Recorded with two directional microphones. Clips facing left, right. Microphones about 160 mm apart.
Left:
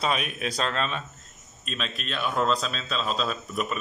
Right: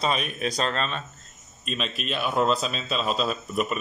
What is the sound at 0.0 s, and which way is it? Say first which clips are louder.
A man's voice: right 1 dB; 5° left (ahead or behind).